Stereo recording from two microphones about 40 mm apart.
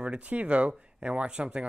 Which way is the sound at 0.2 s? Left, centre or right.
Right.